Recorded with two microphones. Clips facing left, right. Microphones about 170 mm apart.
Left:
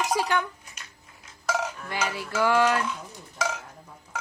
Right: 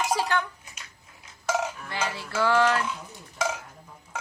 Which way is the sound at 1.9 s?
15° left (ahead or behind).